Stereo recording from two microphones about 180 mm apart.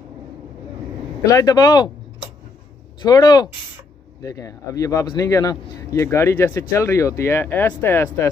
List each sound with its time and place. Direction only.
1.2 s speech: 20° left (ahead or behind)
3.0 s speech: 20° left (ahead or behind)